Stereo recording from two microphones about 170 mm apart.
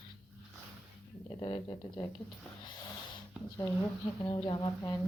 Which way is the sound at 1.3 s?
30° left (ahead or behind).